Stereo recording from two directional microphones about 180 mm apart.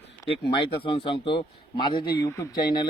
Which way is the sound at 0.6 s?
30° left (ahead or behind).